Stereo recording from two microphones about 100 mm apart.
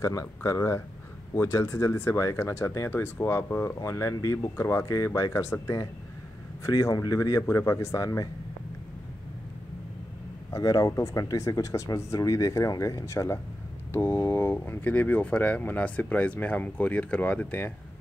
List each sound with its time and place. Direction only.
0.0 s speech: 30° left (ahead or behind)
10.5 s speech: 35° left (ahead or behind); by 17.7 s 20° left (ahead or behind)